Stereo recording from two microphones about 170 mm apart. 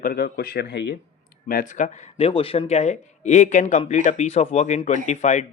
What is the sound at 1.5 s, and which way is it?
Speech, 55° left (ahead or behind).